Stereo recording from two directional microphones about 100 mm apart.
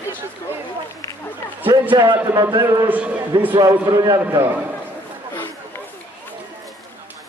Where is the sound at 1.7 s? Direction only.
40° right (ahead or behind).